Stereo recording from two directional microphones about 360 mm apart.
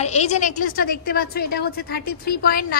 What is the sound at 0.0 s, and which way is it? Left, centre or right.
A woman's voice, centre.